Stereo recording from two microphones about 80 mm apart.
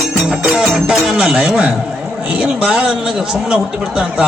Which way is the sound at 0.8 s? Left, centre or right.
Centre.